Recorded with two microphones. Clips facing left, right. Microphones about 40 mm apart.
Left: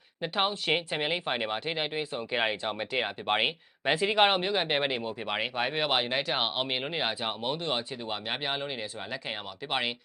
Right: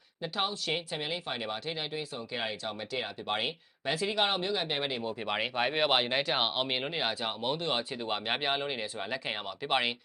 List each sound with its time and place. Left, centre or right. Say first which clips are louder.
0.2 s speech: left 4 dB; left
5.2 s speech: right 1 dB; centre
7.5 s speech: even; centre